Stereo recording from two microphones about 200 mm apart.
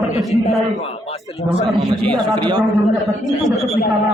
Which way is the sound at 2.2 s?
20° right (ahead or behind).